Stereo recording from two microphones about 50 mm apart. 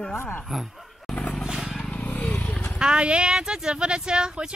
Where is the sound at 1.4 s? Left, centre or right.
Centre.